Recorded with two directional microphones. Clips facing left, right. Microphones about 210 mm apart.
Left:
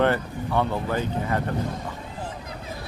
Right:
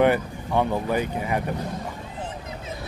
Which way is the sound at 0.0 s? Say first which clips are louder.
Right 2 dB; 15° right (ahead or behind).